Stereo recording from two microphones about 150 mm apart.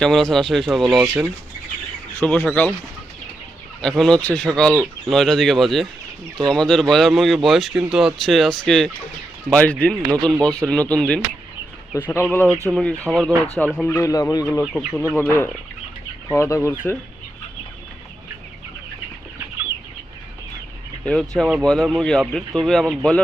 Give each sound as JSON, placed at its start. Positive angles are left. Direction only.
{"t": 0.0, "sound": "speech", "side_deg": 5}
{"t": 1.0, "sound": "speech", "side_deg": -20}
{"t": 2.1, "sound": "speech", "side_deg": 10}
{"t": 3.8, "sound": "speech", "side_deg": 5}
{"t": 14.6, "sound": "speech", "side_deg": 0}
{"t": 15.1, "sound": "speech", "side_deg": 15}
{"t": 21.0, "sound": "speech", "side_deg": 5}